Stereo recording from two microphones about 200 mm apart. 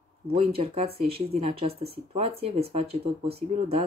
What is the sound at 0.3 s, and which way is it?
Speech, 30° right (ahead or behind).